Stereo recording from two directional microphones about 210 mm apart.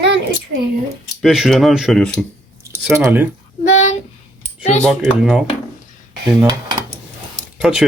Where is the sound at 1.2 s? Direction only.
Centre (ahead or behind).